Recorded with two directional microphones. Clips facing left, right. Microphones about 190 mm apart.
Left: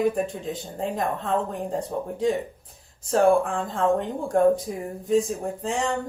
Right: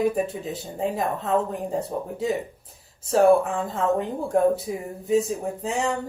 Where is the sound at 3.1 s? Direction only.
Centre (ahead or behind).